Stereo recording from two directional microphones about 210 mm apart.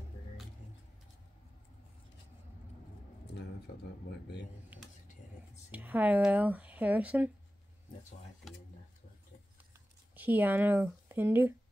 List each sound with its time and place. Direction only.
4.1 s speech: 55° left (ahead or behind)
4.7 s speech: 10° right (ahead or behind)
10.1 s speech: 10° right (ahead or behind)